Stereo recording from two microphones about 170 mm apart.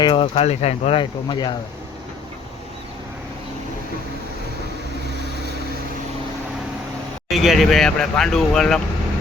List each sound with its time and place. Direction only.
0.0 s speech: 30° left (ahead or behind)
7.3 s speech: centre (ahead or behind)